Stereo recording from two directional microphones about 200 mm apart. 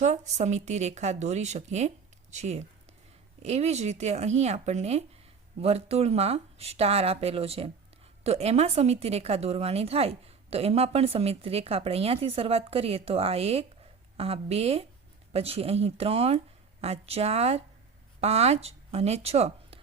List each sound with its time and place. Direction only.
0.0 s a woman's voice: 35° right (ahead or behind)